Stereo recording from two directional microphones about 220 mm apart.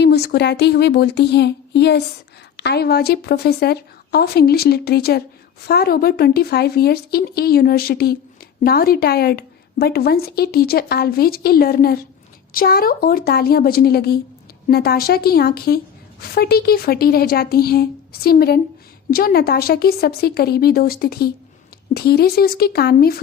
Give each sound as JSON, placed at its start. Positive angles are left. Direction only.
{"t": 0.0, "sound": "a woman's voice", "side_deg": 45}